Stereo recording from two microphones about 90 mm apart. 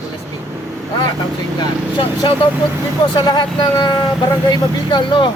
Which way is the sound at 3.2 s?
55° left (ahead or behind).